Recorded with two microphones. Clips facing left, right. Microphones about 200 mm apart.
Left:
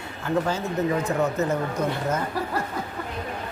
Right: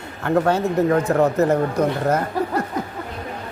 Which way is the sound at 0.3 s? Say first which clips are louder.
Right 7 dB; 65° right (ahead or behind).